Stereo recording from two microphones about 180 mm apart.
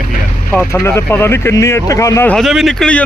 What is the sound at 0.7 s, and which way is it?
Speech, 15° left (ahead or behind).